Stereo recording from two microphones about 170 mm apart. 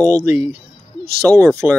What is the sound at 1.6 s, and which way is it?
Speech, 10° right (ahead or behind).